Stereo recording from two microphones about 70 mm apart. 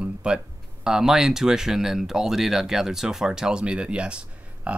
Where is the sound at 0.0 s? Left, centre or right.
Centre.